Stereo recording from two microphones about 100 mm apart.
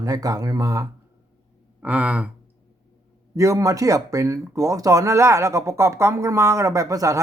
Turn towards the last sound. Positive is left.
turn(degrees=-30)  # may be behind; listen again after turning